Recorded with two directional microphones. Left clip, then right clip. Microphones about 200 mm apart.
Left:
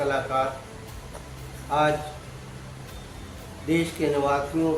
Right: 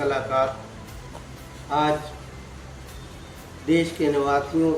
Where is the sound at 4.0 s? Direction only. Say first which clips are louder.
Right 2 dB; centre (ahead or behind).